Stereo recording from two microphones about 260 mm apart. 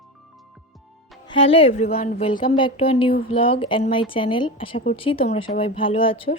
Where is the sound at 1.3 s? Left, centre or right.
Left.